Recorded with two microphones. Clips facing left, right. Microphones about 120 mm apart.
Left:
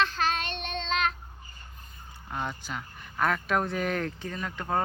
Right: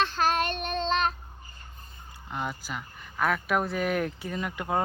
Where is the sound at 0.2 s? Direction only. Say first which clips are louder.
Right 4 dB; 45° right (ahead or behind).